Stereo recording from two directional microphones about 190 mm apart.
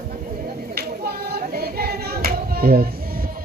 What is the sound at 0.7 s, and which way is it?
Child singing, 55° right (ahead or behind).